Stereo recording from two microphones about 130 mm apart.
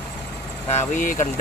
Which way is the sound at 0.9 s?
90° left.